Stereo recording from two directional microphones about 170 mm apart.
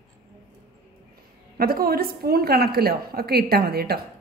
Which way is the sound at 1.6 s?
65° right (ahead or behind).